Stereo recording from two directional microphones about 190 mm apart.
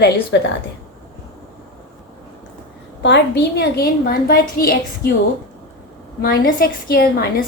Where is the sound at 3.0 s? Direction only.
65° left (ahead or behind).